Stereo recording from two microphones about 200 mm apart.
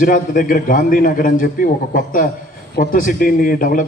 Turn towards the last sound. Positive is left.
turn(degrees=45)  # may be behind; listen again after turning